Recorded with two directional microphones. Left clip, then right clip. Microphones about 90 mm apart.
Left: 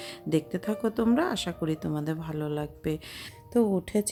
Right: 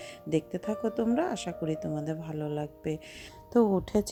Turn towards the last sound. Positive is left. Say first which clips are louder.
# even
turn(degrees=-60)  # may be behind; listen again after turning